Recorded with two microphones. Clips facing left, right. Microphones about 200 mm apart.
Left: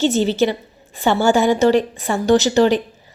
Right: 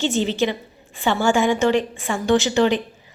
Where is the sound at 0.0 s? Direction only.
40° left (ahead or behind).